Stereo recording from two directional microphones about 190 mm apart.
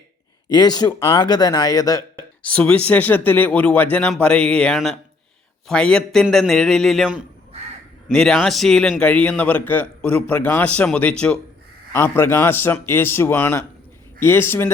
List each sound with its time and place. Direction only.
0.4 s speech: 20° left (ahead or behind)
2.4 s a man's voice: 5° left (ahead or behind)